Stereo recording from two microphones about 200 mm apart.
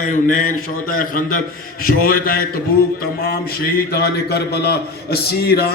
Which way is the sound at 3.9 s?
55° left (ahead or behind).